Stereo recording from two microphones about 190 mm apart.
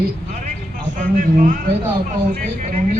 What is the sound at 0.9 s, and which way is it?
Speech, 40° right (ahead or behind).